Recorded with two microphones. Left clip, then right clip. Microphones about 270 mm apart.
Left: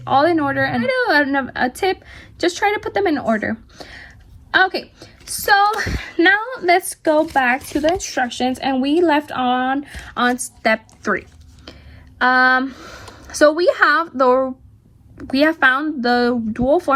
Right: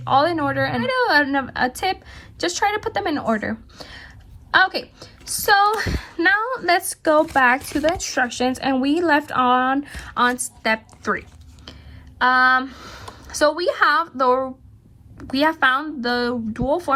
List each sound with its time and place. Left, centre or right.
0.0 s a woman's voice: centre
10.2 s a sound: centre
12.2 s a woman's voice: centre